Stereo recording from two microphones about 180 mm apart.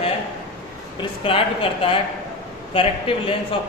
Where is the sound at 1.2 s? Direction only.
30° left (ahead or behind).